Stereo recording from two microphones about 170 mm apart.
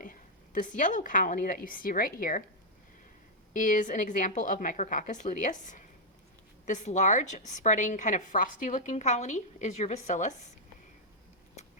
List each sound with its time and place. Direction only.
0.0 s a woman's voice: 50° left (ahead or behind)
3.5 s a woman's voice: 50° left (ahead or behind)